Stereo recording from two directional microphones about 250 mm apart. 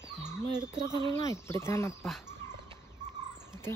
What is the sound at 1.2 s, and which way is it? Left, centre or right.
Speech, centre.